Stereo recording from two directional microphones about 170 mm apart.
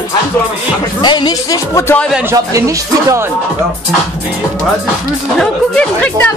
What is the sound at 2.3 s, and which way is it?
Speech, 20° right (ahead or behind).